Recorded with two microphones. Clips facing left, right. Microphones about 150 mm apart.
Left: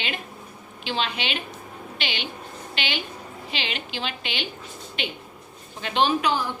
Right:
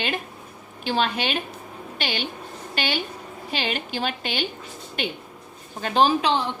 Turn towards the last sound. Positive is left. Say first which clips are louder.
# right 2 dB
turn(degrees=-25)  # may be behind; listen again after turning